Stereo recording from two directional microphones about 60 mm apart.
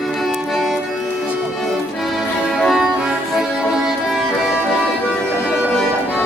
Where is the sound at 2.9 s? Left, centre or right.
Centre.